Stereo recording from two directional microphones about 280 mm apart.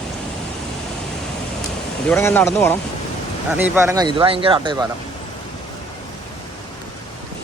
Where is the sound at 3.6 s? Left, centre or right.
Centre.